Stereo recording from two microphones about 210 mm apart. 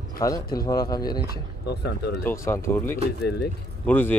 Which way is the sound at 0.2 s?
15° left (ahead or behind).